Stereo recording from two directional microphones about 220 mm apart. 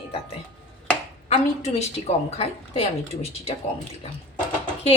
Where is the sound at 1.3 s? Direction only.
30° left (ahead or behind).